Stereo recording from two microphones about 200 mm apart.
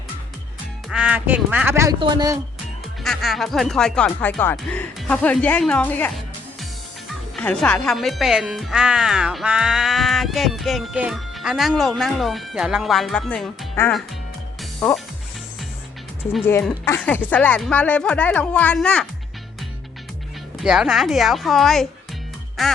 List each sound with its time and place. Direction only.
0.9 s speech: 5° right (ahead or behind)
3.0 s speech: centre (ahead or behind)
14.6 s music: centre (ahead or behind)
16.5 s speech: 10° left (ahead or behind)
20.6 s speech: 5° right (ahead or behind)